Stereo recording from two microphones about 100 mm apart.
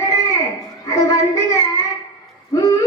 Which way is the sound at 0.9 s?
35° left (ahead or behind).